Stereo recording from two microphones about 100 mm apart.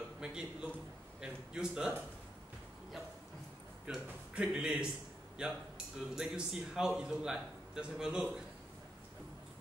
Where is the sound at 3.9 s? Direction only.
10° right (ahead or behind).